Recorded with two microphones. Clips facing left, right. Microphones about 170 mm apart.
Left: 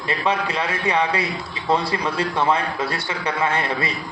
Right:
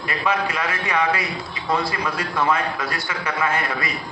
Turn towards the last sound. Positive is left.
turn(degrees=30)  # may be behind; listen again after turning